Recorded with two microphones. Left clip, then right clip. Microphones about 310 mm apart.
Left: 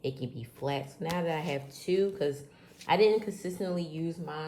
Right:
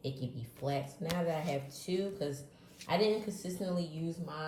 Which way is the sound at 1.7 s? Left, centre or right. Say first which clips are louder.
Left 8 dB; left.